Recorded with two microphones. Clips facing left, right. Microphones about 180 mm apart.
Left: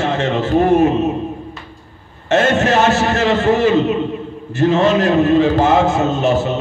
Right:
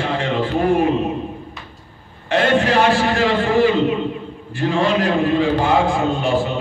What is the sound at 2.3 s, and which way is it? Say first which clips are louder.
A man's voice: left 2 dB; 45° left (ahead or behind).